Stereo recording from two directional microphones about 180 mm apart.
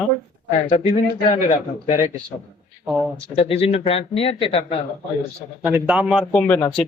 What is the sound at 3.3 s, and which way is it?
Speech, 30° left (ahead or behind).